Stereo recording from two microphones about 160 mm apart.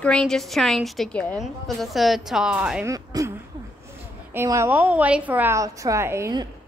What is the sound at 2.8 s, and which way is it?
Speech, 20° right (ahead or behind).